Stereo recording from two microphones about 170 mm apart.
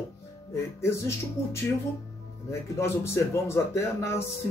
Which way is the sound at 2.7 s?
15° left (ahead or behind).